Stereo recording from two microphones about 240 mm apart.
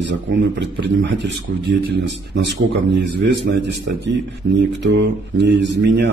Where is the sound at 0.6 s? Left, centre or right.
Right.